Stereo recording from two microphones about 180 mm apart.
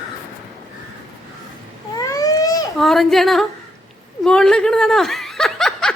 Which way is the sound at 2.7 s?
Centre (ahead or behind).